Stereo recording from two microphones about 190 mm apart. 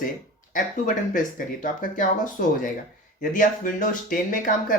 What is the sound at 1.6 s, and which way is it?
Speech, 45° left (ahead or behind).